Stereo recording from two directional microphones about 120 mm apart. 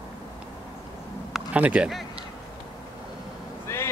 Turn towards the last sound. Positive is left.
turn(degrees=20)  # may be behind; listen again after turning